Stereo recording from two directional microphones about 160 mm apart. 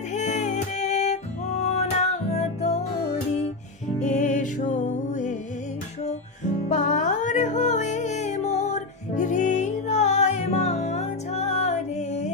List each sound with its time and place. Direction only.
0.1 s music: 45° left (ahead or behind)
4.0 s music: 50° left (ahead or behind)
6.7 s music: 50° left (ahead or behind)